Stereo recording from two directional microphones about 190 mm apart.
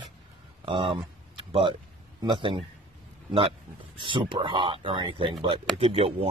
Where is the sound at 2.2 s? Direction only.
25° right (ahead or behind).